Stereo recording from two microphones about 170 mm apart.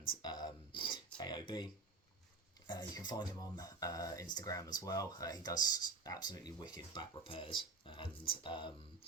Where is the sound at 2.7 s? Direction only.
25° left (ahead or behind).